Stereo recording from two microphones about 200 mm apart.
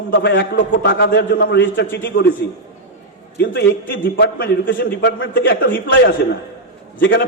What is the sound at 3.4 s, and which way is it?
A man's voice, 55° left (ahead or behind).